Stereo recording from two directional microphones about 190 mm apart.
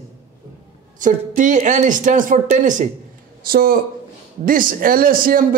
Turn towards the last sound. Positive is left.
turn(degrees=-50)  # may be behind; listen again after turning